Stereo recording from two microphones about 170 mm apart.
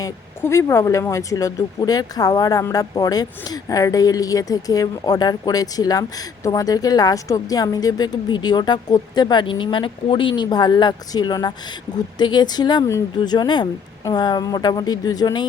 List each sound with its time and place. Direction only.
0.0 s speech: 15° left (ahead or behind)